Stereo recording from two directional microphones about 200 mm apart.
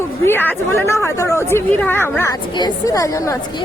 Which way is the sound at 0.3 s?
10° left (ahead or behind).